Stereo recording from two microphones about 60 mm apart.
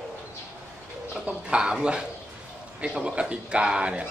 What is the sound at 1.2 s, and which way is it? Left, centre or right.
Speech, centre.